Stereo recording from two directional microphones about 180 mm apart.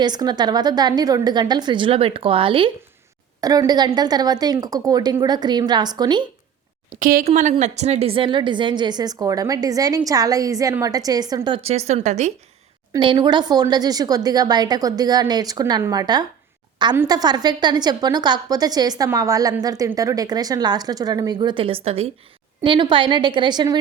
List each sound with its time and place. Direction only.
0.0 s a woman's voice: 25° right (ahead or behind)
6.9 s speech: 50° right (ahead or behind)
7.3 s a woman's voice: 40° right (ahead or behind)
12.9 s a woman's voice: 25° right (ahead or behind)